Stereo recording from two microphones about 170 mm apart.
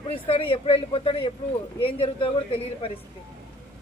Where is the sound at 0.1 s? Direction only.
30° left (ahead or behind).